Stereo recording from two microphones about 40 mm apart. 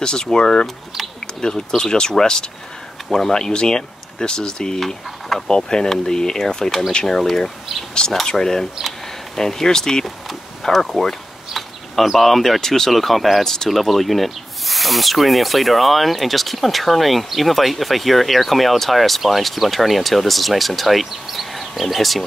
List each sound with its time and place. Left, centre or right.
0.0 s speech: centre
3.3 s speech: centre
4.7 s speech: centre
10.0 s a sound: centre
12.5 s speech: centre